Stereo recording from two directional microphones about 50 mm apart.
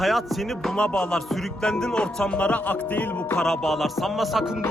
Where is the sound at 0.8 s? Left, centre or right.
Centre.